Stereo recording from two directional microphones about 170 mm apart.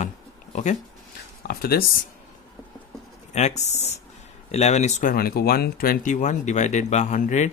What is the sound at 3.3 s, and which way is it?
Speech, 40° left (ahead or behind).